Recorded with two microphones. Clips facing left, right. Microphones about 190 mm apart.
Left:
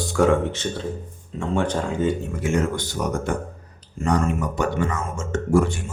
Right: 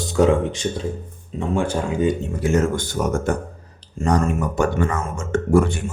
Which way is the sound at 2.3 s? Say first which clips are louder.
Right 3 dB; 35° right (ahead or behind).